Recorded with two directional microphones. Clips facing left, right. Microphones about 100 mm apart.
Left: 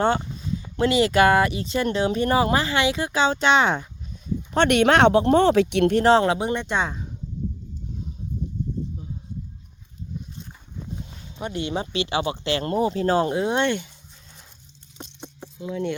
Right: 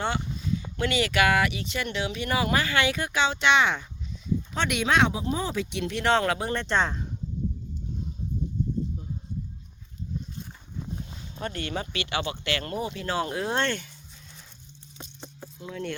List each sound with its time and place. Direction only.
0.8 s speech: 30° left (ahead or behind)
4.5 s speech: 65° left (ahead or behind)
6.0 s speech: 30° left (ahead or behind); by 7.1 s 5° left (ahead or behind)
10.4 s a sound: 5° right (ahead or behind)
11.3 s speech: 20° left (ahead or behind); by 13.3 s 35° left (ahead or behind)
13.3 s speech: 20° left (ahead or behind)
14.9 s a sound: 20° left (ahead or behind)
15.6 s speech: 20° left (ahead or behind)